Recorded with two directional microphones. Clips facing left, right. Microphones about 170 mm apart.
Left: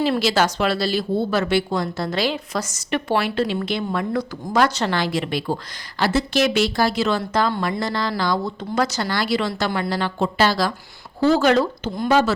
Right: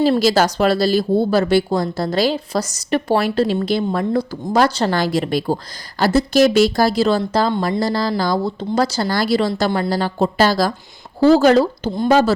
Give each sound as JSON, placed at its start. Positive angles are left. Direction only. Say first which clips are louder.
{"t": 0.0, "sound": "speech", "louder": "right 5 dB", "side_deg": -40}